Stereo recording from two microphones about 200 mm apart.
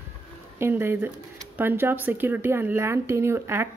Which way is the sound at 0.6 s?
10° right (ahead or behind).